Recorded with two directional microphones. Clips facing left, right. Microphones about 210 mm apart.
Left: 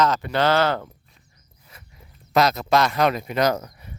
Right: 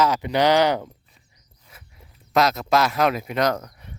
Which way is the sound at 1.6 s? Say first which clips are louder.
Left 1 dB; centre (ahead or behind).